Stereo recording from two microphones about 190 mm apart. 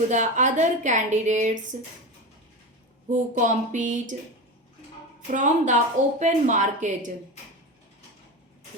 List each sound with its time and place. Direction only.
0.1 s a woman's voice: 40° right (ahead or behind)
3.1 s a woman's voice: 40° right (ahead or behind)
5.3 s a woman's voice: 40° right (ahead or behind)